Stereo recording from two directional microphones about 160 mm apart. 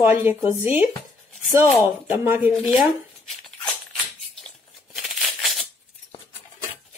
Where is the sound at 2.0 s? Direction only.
10° right (ahead or behind).